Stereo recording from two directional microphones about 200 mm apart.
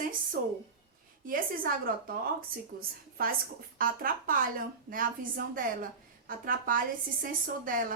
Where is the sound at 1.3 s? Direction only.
45° right (ahead or behind).